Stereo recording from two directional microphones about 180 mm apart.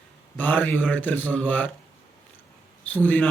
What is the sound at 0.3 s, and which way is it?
A man's voice, 10° left (ahead or behind).